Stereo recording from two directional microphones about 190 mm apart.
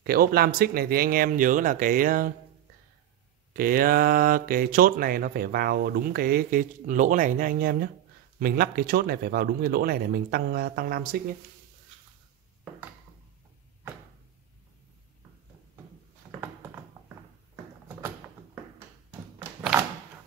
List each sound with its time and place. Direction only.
0.0 s speech: 50° right (ahead or behind)
3.5 s speech: 50° right (ahead or behind)
16.3 s a sound: 10° right (ahead or behind)